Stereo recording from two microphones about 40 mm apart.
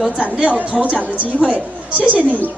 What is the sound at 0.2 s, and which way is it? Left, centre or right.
A woman's voice, right.